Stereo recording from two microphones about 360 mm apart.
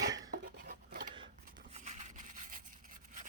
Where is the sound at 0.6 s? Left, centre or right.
Right.